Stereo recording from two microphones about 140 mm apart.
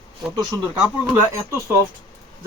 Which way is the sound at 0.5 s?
15° left (ahead or behind).